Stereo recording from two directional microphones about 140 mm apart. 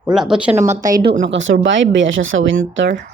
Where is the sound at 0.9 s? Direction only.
70° right (ahead or behind).